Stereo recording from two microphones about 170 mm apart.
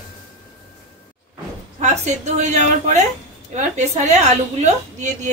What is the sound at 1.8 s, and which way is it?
A woman's voice, 45° right (ahead or behind).